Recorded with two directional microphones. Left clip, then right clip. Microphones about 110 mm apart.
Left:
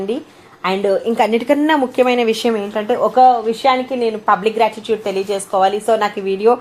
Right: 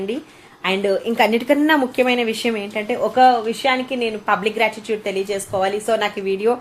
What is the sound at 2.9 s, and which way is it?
A woman's voice, 15° left (ahead or behind).